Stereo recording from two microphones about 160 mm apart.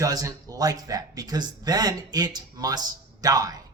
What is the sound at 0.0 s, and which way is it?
Speech, 20° right (ahead or behind).